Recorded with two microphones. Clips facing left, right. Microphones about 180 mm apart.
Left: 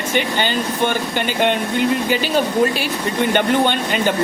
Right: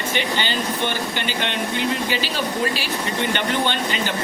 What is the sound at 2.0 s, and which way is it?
Speech, 50° left (ahead or behind).